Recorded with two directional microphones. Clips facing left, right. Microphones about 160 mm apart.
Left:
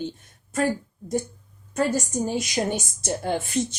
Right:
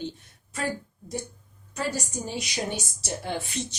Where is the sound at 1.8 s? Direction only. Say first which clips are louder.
Left 7 dB; 45° left (ahead or behind).